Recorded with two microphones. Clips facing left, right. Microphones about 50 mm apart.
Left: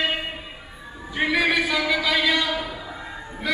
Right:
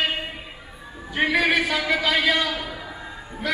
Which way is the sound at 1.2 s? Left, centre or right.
Centre.